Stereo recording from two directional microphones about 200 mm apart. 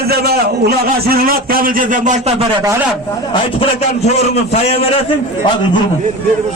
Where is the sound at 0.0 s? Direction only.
50° right (ahead or behind); by 2.3 s 35° right (ahead or behind).